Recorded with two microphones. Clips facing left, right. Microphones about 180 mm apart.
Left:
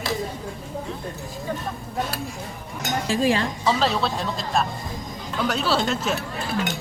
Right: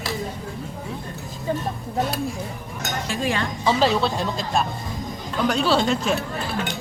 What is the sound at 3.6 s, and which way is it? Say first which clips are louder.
Speech: right 3 dB; centre (ahead or behind).